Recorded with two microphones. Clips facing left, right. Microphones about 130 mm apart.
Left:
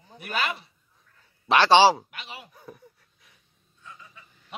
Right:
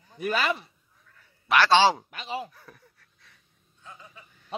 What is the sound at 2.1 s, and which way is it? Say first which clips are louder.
Speech: right 9 dB; 35° right (ahead or behind).